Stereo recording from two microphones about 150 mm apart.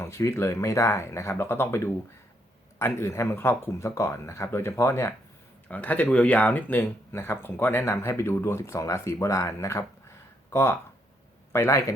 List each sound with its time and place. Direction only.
0.0 s a man's voice: 20° left (ahead or behind)